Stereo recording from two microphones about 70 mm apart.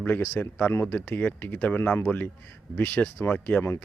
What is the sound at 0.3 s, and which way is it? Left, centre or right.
Speech, left.